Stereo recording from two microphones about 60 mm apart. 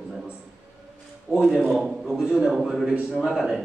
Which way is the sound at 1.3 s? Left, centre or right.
Right.